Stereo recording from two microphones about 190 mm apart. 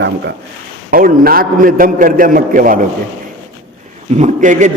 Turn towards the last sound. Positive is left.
turn(degrees=-40)  # may be behind; listen again after turning